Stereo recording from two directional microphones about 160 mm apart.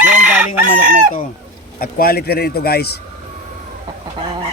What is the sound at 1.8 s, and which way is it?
Speech, 65° left (ahead or behind).